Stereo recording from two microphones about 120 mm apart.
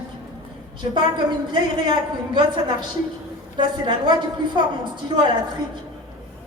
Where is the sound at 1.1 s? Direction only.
40° right (ahead or behind).